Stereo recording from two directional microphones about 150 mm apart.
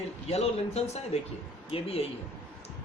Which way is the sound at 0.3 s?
45° left (ahead or behind).